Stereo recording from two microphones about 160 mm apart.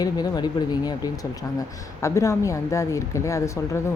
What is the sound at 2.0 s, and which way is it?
Speech, 20° left (ahead or behind).